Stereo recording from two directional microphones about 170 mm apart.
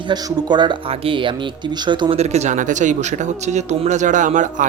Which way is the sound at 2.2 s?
40° right (ahead or behind).